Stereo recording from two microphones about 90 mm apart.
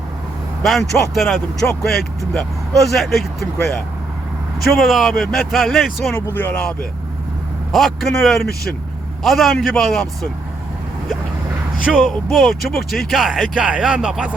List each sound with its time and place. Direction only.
0.6 s speech: centre (ahead or behind)
4.7 s speech: centre (ahead or behind)
6.3 s speech: 20° left (ahead or behind)
7.7 s speech: centre (ahead or behind)
11.9 s speech: centre (ahead or behind)